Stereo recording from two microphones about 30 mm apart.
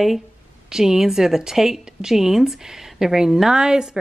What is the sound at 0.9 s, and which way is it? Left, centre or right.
A woman's voice, centre.